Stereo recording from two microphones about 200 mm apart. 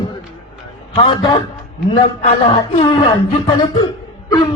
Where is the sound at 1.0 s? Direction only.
25° left (ahead or behind).